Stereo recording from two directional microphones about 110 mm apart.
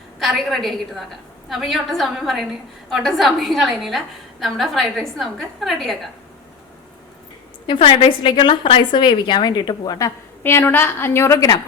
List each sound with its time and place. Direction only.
0.2 s a woman's voice: centre (ahead or behind)
7.7 s a woman's voice: 50° left (ahead or behind); by 10.1 s 35° left (ahead or behind)
10.4 s a woman's voice: 20° left (ahead or behind)